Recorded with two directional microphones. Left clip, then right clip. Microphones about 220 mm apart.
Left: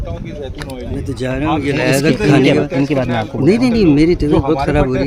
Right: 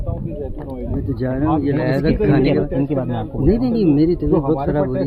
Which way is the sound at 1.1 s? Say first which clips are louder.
Left 2 dB; 45° left (ahead or behind).